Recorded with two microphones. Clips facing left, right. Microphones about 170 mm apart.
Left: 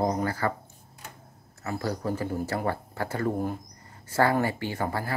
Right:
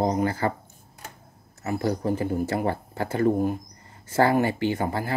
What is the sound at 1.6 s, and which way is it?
Speech, 20° right (ahead or behind).